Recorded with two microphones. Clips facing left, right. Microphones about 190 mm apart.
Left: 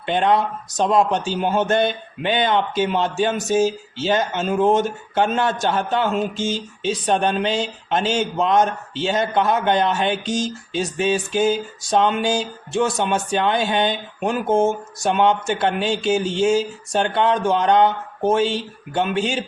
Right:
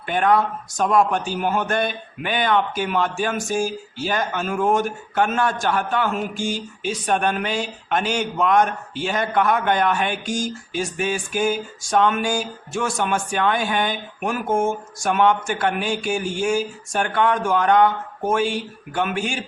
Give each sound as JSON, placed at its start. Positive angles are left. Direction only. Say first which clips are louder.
{"t": 0.0, "sound": "a man's voice", "louder": "left 1 dB", "side_deg": 25}